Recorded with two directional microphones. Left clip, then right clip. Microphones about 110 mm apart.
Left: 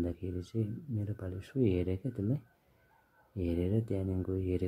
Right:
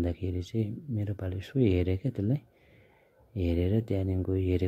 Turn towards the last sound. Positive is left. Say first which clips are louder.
# right 5 dB
turn(degrees=-35)  # may be behind; listen again after turning